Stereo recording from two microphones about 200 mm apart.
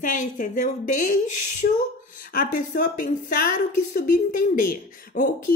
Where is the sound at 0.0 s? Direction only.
40° left (ahead or behind).